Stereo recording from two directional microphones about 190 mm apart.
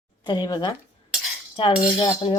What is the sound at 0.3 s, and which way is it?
Speech, 20° left (ahead or behind).